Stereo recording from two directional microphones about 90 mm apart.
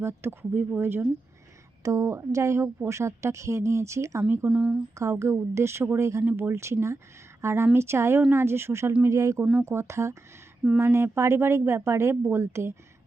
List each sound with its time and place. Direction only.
0.0 s speech: 25° right (ahead or behind)
1.8 s a woman's voice: 35° right (ahead or behind)
4.4 s speech: 10° right (ahead or behind)
5.2 s a woman's voice: 30° right (ahead or behind)